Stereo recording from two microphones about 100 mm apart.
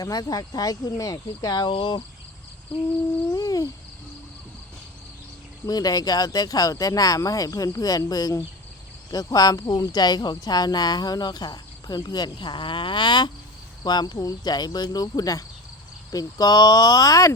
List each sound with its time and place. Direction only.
0.0 s speech: 35° left (ahead or behind)
1.7 s cricket: 55° left (ahead or behind)
3.3 s owl: 35° left (ahead or behind)
5.6 s speech: 40° left (ahead or behind)